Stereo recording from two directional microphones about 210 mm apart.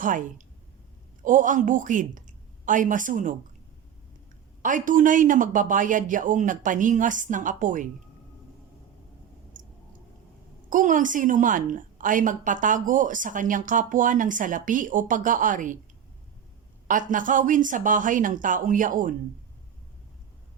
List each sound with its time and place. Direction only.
0.0 s a woman's voice: 40° right (ahead or behind)
4.6 s a woman's voice: 40° right (ahead or behind)
9.5 s a sound: 40° right (ahead or behind)
10.7 s a woman's voice: 40° right (ahead or behind)
16.9 s a woman's voice: 40° right (ahead or behind)